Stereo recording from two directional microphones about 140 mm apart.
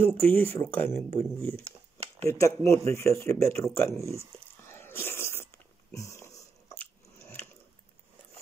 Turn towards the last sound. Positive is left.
turn(degrees=20)  # may be behind; listen again after turning